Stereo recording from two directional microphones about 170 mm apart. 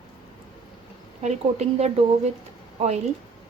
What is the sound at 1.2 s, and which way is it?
Speech, 40° right (ahead or behind).